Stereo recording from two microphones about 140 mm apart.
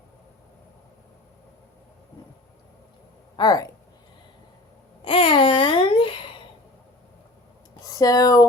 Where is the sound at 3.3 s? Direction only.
30° left (ahead or behind).